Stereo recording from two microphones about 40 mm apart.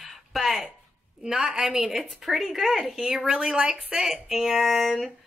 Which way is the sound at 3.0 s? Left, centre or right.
Centre.